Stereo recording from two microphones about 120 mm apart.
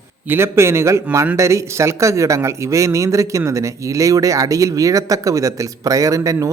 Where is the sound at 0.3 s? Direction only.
20° right (ahead or behind).